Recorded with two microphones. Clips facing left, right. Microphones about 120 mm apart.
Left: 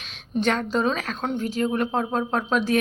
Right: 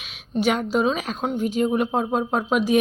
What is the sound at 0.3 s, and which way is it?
A woman's voice, 10° right (ahead or behind).